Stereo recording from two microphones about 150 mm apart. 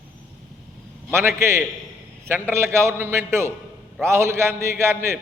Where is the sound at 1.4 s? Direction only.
15° right (ahead or behind).